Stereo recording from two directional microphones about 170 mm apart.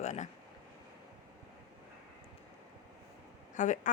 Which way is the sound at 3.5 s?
45° left (ahead or behind).